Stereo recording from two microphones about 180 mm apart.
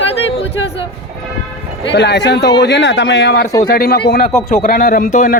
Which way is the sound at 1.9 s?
70° left (ahead or behind).